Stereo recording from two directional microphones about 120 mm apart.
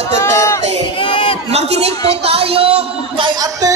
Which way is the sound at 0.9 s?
45° left (ahead or behind).